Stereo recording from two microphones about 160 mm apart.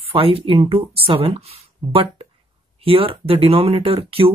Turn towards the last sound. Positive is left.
turn(degrees=-35)  # may be behind; listen again after turning